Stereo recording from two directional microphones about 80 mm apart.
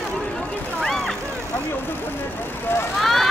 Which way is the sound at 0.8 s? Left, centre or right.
Centre.